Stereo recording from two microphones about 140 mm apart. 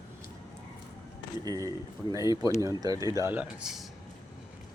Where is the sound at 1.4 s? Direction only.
25° right (ahead or behind).